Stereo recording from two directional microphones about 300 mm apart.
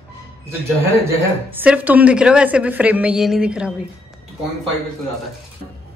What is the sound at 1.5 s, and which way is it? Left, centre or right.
A woman's voice, centre.